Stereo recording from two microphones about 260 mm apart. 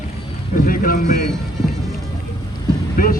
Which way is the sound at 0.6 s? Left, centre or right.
Left.